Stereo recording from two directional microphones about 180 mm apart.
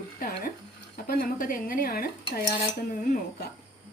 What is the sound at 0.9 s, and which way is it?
A woman's voice, 55° left (ahead or behind).